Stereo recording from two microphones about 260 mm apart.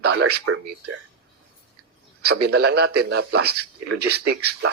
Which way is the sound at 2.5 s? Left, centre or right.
Right.